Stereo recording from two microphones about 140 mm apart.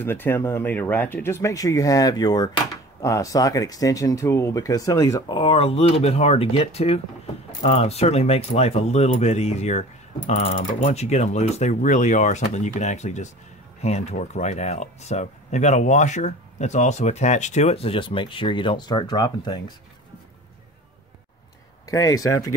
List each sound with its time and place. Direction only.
0.0 s speech: 15° left (ahead or behind)
5.3 s speech: 40° left (ahead or behind)
21.8 s speech: 25° left (ahead or behind)